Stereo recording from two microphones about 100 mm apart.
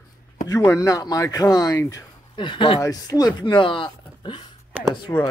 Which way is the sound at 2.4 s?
55° left (ahead or behind).